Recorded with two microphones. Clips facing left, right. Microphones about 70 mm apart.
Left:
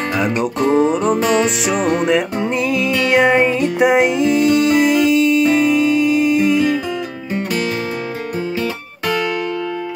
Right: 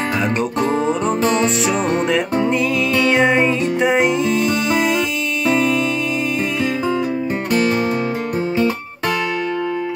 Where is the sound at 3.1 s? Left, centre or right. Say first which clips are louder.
Left 5 dB; centre.